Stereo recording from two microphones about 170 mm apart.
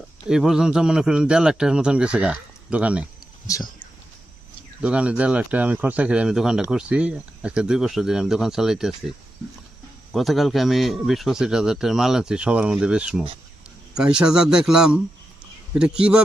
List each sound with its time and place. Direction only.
0.3 s speech: 5° right (ahead or behind)
3.4 s speech: 20° left (ahead or behind)
4.8 s speech: 5° right (ahead or behind)
10.1 s speech: centre (ahead or behind)